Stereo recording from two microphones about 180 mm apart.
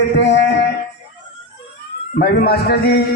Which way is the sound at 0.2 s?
80° left.